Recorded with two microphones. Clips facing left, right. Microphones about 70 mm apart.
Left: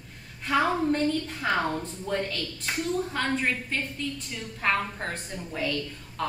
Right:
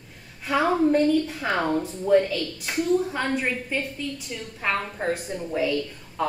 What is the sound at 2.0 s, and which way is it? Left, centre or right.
A woman's voice, centre.